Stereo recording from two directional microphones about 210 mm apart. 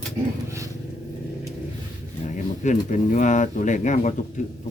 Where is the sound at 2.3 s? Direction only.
35° left (ahead or behind).